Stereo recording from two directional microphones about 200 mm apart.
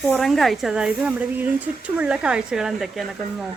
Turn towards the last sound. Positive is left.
turn(degrees=0)  # may be behind; listen again after turning